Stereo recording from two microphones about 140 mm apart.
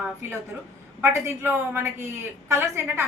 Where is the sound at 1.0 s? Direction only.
15° right (ahead or behind).